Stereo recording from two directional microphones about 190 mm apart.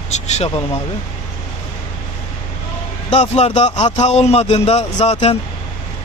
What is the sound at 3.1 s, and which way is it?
A man's voice, 35° left (ahead or behind).